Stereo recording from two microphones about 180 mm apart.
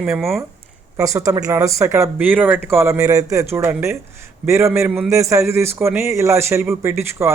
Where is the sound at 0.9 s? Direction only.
15° right (ahead or behind).